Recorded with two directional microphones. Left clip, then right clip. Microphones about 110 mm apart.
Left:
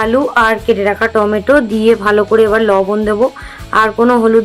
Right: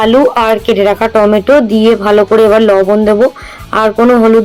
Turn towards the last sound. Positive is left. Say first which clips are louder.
# right 2 dB
turn(degrees=-35)  # may be behind; listen again after turning